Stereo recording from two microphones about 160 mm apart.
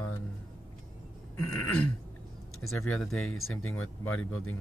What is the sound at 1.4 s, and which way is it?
Speech, 15° left (ahead or behind).